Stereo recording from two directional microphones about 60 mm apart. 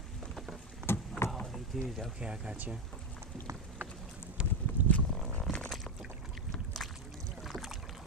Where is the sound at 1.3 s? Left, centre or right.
Centre.